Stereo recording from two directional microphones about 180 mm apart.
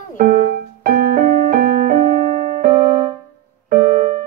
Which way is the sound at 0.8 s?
55° right (ahead or behind).